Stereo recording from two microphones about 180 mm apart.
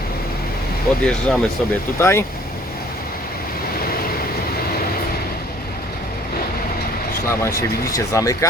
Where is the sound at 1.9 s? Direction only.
15° left (ahead or behind).